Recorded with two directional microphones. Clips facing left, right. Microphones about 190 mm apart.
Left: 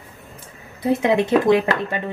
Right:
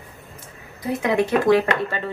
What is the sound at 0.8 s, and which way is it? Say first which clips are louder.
Speech: left 3 dB; 25° left (ahead or behind).